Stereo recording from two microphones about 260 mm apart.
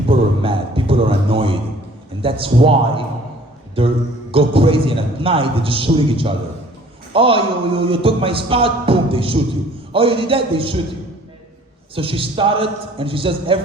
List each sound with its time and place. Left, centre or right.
0.1 s a sound: right
2.2 s a man's voice: right
11.9 s a man's voice: right